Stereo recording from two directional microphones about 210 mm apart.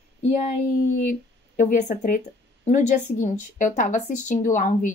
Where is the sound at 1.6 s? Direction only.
35° left (ahead or behind).